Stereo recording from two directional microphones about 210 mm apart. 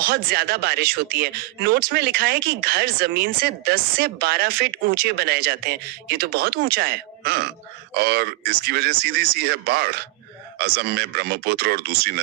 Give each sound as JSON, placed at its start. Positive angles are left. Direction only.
{"t": 0.0, "sound": "speech", "side_deg": -50}